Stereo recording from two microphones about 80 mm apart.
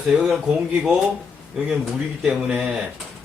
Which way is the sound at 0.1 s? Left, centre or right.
Centre.